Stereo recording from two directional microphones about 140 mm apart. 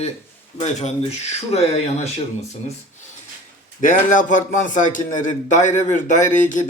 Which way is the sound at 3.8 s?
70° left (ahead or behind).